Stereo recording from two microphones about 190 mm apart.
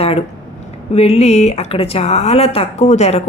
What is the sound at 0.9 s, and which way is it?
A woman's voice, 30° left (ahead or behind).